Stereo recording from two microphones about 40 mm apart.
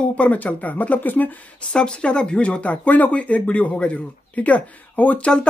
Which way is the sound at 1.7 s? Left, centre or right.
Left.